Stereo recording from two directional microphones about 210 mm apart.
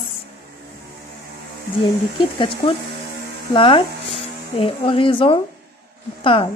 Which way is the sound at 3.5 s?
25° left (ahead or behind).